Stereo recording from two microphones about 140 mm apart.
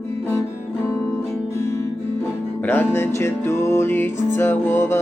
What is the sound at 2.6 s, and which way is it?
Music, 15° left (ahead or behind).